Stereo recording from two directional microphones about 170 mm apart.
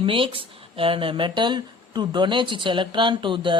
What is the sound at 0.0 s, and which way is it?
Speech, 30° right (ahead or behind).